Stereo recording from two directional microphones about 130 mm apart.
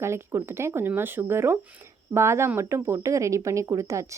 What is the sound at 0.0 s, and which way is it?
Speech, 20° right (ahead or behind).